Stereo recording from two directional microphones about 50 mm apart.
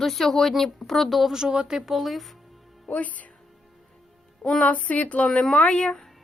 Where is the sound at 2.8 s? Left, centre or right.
Left.